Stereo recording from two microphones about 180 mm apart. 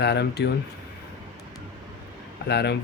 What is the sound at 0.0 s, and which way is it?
Speech, 65° left (ahead or behind).